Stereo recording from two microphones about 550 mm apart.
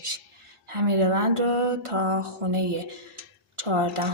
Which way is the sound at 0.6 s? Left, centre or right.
Right.